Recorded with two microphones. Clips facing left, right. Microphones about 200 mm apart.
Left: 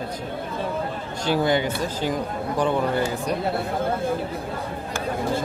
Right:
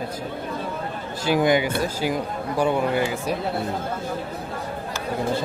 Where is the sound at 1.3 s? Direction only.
15° right (ahead or behind).